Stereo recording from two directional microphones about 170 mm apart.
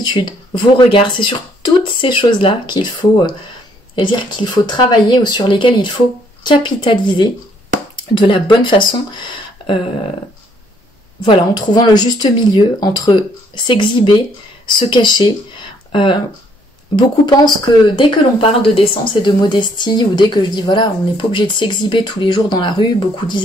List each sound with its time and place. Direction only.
0.0 s speech: 25° left (ahead or behind)
11.2 s speech: 25° left (ahead or behind)